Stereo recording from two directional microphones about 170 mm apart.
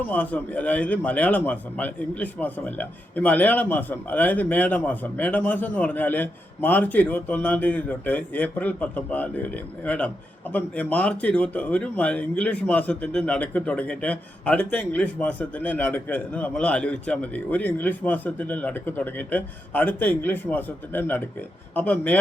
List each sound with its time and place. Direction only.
0.1 s speech: 10° left (ahead or behind)